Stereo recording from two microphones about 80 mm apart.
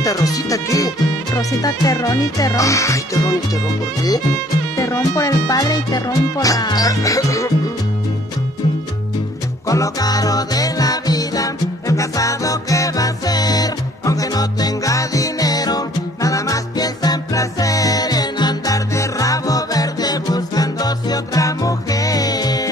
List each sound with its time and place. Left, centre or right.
0.0 s speech: left
4.7 s music: left
9.7 s music: left
18.9 s music: left